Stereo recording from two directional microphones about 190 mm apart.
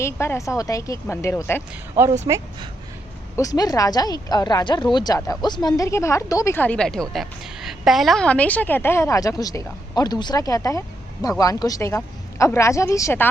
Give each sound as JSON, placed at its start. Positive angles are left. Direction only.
{"t": 0.0, "sound": "a woman's voice", "side_deg": 15}
{"t": 2.2, "sound": "speech", "side_deg": -15}
{"t": 3.3, "sound": "a woman's voice", "side_deg": 20}